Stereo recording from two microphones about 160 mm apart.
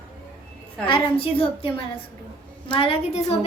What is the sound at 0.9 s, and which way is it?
Speech, 35° left (ahead or behind).